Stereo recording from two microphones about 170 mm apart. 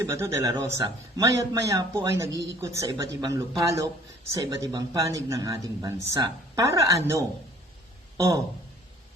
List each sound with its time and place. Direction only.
0.0 s a man's voice: 20° right (ahead or behind)